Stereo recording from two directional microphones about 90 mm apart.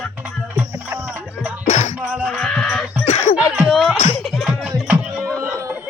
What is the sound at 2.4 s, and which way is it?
Music, 5° left (ahead or behind).